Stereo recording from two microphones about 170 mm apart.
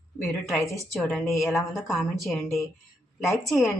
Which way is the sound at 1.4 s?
15° left (ahead or behind).